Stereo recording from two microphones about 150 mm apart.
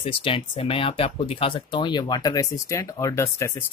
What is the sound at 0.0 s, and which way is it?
Speech, 35° left (ahead or behind).